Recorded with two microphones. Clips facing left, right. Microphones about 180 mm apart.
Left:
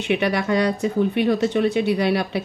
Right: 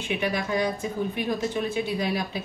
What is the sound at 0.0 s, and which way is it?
Speech, 70° left (ahead or behind).